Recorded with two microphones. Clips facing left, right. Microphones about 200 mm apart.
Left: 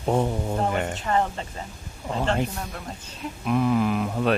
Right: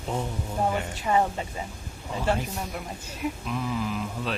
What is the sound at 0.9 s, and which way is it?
Speech, 10° right (ahead or behind).